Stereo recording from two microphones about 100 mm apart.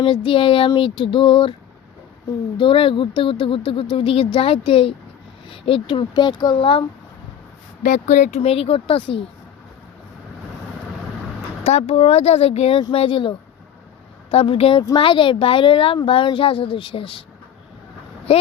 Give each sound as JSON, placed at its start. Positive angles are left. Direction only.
{"t": 0.0, "sound": "speech", "side_deg": 60}
{"t": 2.6, "sound": "speech", "side_deg": 60}
{"t": 8.4, "sound": "speech", "side_deg": 75}
{"t": 11.6, "sound": "speech", "side_deg": 90}
{"t": 12.9, "sound": "speech", "side_deg": 65}